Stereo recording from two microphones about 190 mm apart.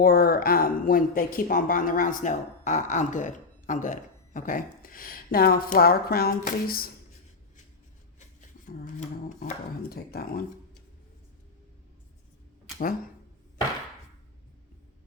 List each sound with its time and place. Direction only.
0.0 s speech: 55° left (ahead or behind)
8.4 s speech: 40° left (ahead or behind)
9.9 s speech: 50° left (ahead or behind)